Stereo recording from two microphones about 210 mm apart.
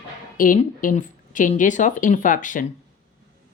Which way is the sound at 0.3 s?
40° left (ahead or behind).